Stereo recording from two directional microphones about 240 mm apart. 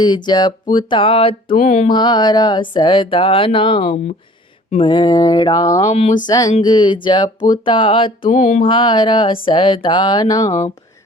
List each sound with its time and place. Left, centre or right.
0.0 s speech: centre
1.9 s speech: centre
4.7 s a sound: centre
5.8 s speech: left
6.2 s a sound: centre
6.5 s speech: centre
8.2 s mantra: left
8.6 s speech: centre